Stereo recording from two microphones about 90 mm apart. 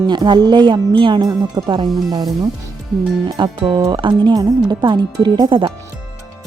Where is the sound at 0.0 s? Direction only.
55° right (ahead or behind).